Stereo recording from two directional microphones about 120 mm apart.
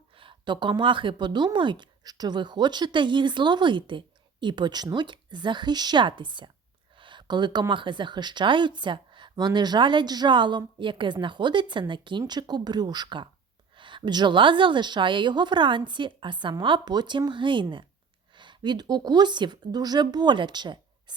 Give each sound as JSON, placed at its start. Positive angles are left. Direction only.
{"t": 0.2, "sound": "speech", "side_deg": -40}